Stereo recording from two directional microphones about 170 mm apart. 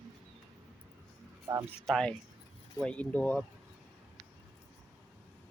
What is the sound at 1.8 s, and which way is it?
Speech, centre (ahead or behind).